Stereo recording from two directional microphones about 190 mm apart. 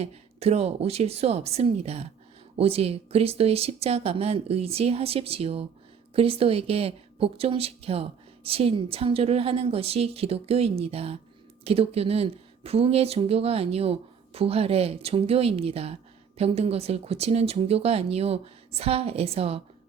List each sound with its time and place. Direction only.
0.0 s a woman's voice: 35° right (ahead or behind)